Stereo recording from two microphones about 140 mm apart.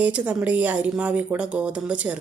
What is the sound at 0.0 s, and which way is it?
Speech, 10° right (ahead or behind).